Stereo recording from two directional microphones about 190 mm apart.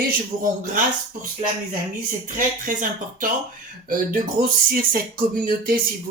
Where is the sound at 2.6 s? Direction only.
45° right (ahead or behind).